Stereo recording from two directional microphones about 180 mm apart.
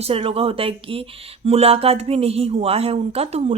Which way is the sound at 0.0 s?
30° right (ahead or behind).